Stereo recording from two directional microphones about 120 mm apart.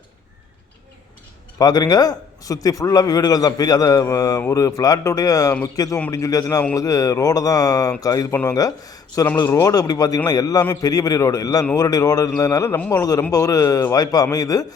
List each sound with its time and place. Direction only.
1.5 s a man's voice: 30° left (ahead or behind)
9.2 s a man's voice: 20° left (ahead or behind)